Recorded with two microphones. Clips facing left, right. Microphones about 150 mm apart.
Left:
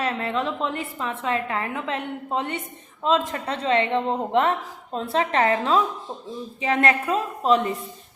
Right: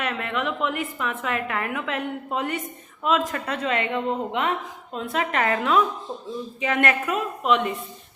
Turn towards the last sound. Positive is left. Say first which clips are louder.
# left 2 dB
turn(degrees=35)  # may be behind; listen again after turning